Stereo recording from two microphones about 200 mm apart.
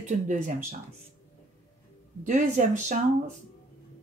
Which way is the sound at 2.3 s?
35° right (ahead or behind).